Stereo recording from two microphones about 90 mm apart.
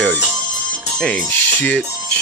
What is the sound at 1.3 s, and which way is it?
Music, 15° left (ahead or behind).